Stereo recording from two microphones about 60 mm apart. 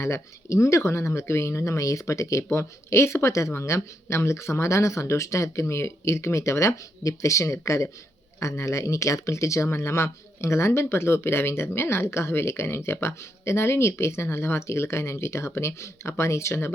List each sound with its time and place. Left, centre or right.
0.0 s speech: left